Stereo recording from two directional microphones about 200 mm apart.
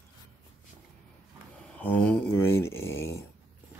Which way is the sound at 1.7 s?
5° left (ahead or behind).